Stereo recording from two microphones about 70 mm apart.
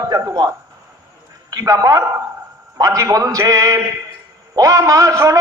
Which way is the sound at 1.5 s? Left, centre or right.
Right.